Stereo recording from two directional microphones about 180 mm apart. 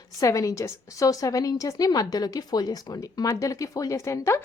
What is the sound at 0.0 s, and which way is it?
A woman's voice, 20° left (ahead or behind).